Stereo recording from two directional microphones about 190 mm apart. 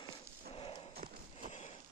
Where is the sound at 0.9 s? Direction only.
45° right (ahead or behind).